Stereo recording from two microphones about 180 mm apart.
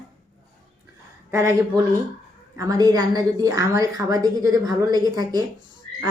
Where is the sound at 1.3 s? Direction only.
15° right (ahead or behind).